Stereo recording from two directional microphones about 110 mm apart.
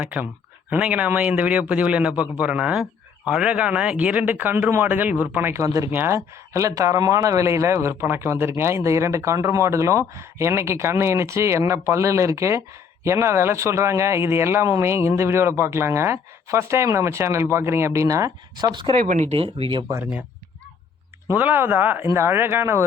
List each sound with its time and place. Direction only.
0.0 s a man's voice: 15° right (ahead or behind); by 18.7 s 30° right (ahead or behind)
18.7 s speech: 45° right (ahead or behind)
19.2 s speech: 65° right (ahead or behind)
21.2 s a man's voice: 15° right (ahead or behind)